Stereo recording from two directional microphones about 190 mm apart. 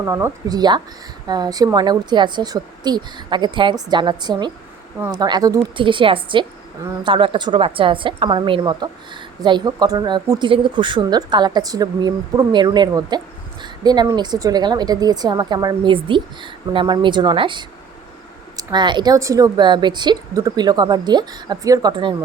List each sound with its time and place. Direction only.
0.0 s a woman's voice: 15° right (ahead or behind)